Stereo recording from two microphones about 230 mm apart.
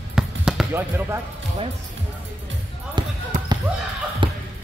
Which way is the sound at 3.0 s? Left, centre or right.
Centre.